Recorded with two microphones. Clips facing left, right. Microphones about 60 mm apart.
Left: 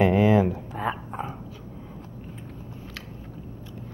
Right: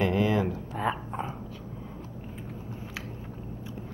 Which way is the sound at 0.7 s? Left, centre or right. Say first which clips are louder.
Left 1 dB; centre.